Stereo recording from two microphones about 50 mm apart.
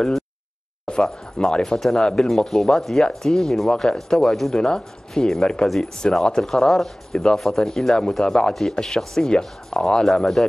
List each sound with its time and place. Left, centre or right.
0.8 s speech: centre